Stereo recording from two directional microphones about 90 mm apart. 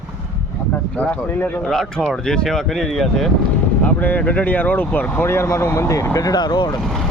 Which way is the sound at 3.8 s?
20° left (ahead or behind).